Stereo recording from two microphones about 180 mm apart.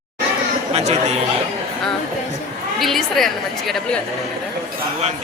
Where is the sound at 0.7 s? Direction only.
40° right (ahead or behind).